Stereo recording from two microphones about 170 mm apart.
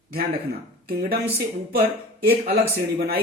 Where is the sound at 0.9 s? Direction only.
60° right (ahead or behind).